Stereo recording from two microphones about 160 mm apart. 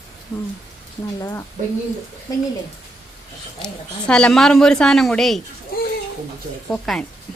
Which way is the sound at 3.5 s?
5° left (ahead or behind).